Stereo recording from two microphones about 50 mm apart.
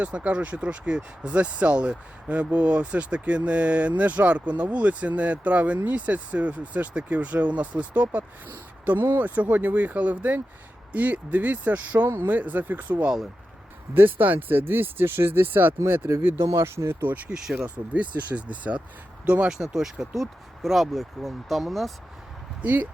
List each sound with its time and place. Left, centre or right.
0.0 s speech: right
12.0 s speech: right
12.4 s speech: right
16.1 s speech: right
16.4 s speech: right
17.0 s speech: right
17.3 s speech: centre
17.9 s speech: right
19.7 s speech: centre
22.6 s speech: right